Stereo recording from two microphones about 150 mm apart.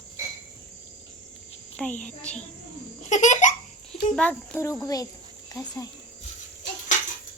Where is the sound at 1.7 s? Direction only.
5° left (ahead or behind).